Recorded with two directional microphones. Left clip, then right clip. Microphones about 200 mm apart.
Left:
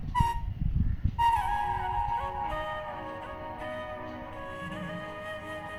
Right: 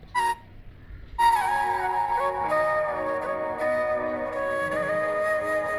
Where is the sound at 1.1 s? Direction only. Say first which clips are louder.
Right 5 dB; 35° right (ahead or behind).